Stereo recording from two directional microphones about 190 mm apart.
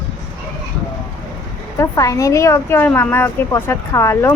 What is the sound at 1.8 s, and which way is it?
A woman's voice, 15° left (ahead or behind).